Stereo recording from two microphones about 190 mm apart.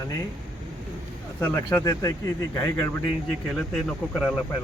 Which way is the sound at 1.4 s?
15° left (ahead or behind).